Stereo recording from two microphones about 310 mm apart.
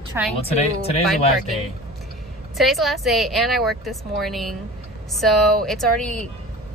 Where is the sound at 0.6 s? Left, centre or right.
Centre.